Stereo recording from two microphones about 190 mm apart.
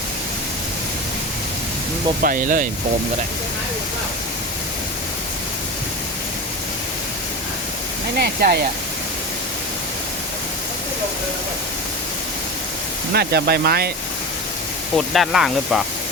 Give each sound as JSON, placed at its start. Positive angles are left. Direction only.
{"t": 2.2, "sound": "speech", "side_deg": -45}
{"t": 8.2, "sound": "speech", "side_deg": -50}
{"t": 13.1, "sound": "speech", "side_deg": -55}
{"t": 14.9, "sound": "speech", "side_deg": 0}